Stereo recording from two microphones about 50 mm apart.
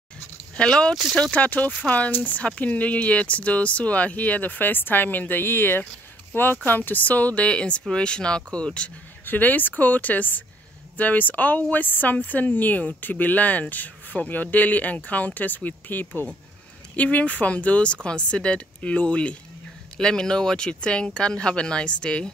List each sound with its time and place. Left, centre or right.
0.6 s speech: centre
1.3 s speech: left
9.2 s speech: left; by 22.3 s centre